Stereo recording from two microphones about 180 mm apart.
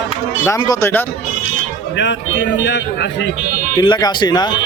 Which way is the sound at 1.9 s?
85° left.